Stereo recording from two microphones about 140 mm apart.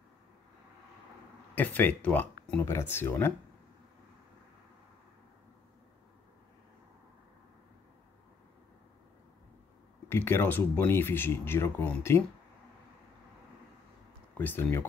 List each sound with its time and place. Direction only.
1.5 s speech: 10° left (ahead or behind)
10.0 s speech: 15° left (ahead or behind)
14.3 s speech: 15° left (ahead or behind)